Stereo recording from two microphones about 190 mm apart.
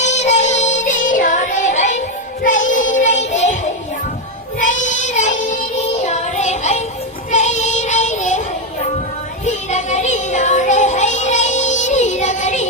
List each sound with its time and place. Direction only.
0.0 s child singing: 35° left (ahead or behind)
4.6 s child singing: 40° left (ahead or behind)
6.1 s music: 35° left (ahead or behind)
7.3 s child singing: 40° left (ahead or behind)
9.6 s music: 35° left (ahead or behind)